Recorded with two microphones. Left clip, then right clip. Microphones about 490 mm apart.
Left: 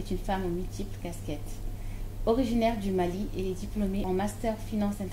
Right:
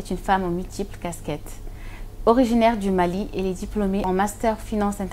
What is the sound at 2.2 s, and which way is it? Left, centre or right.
A woman's voice, right.